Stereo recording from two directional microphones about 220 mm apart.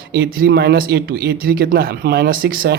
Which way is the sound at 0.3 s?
45° right (ahead or behind).